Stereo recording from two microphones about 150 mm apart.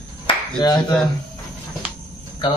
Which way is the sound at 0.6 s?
30° left (ahead or behind).